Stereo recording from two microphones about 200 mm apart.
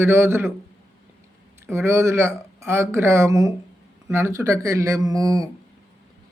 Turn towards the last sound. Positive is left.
turn(degrees=-15)  # may be behind; listen again after turning